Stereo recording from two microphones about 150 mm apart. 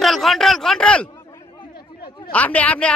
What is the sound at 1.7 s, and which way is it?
Chatter, 90° left.